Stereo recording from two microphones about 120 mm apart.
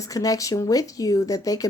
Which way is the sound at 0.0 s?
30° left (ahead or behind).